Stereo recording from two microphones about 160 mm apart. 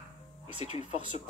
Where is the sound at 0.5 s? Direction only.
40° left (ahead or behind).